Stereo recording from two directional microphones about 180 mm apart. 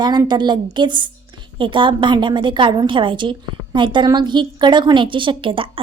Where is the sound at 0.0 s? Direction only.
25° right (ahead or behind).